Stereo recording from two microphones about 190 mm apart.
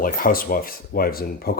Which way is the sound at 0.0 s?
50° left (ahead or behind).